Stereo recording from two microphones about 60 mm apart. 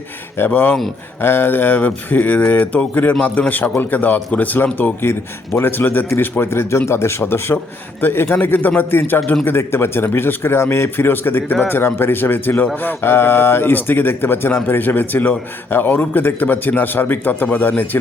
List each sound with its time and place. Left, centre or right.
0.3 s speech: left
5.5 s a man's voice: left